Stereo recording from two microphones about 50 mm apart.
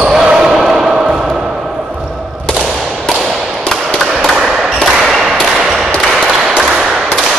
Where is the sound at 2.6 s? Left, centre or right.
Centre.